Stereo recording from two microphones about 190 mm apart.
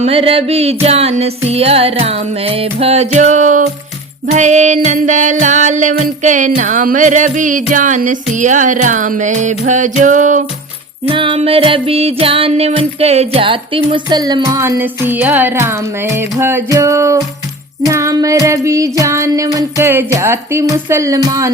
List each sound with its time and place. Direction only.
0.0 s music: 30° right (ahead or behind)
11.1 s music: 25° right (ahead or behind)